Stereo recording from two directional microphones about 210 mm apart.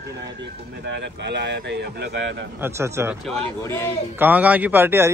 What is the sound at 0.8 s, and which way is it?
Speech, 55° right (ahead or behind).